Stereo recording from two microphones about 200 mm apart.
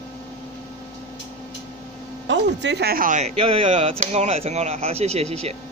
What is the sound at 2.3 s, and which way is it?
Speech, 60° right (ahead or behind).